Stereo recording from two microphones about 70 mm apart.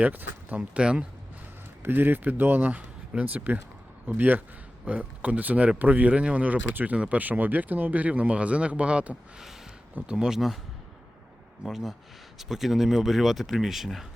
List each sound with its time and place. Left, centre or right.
0.0 s speech: right
1.8 s speech: right; by 10.6 s centre
11.6 s speech: centre